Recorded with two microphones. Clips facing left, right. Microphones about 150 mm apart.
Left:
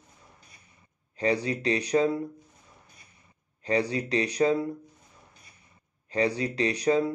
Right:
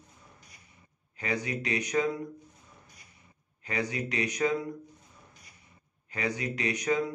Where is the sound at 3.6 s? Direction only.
35° left (ahead or behind).